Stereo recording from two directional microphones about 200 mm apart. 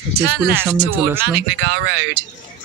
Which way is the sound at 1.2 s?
55° right (ahead or behind).